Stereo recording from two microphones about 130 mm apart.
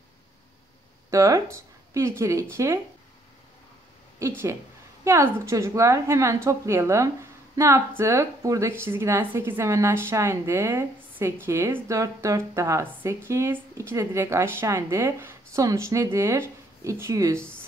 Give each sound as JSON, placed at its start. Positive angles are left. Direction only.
{"t": 1.1, "sound": "a woman's voice", "side_deg": -25}
{"t": 4.2, "sound": "a woman's voice", "side_deg": -20}